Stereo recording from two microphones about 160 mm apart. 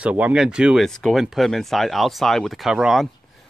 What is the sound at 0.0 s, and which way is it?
Speech, 10° right (ahead or behind).